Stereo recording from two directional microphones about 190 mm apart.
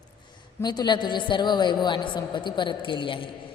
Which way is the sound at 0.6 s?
20° left (ahead or behind).